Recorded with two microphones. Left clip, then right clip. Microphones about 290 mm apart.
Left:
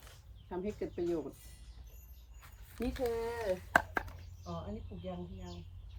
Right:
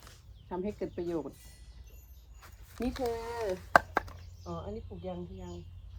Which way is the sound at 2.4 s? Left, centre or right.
Centre.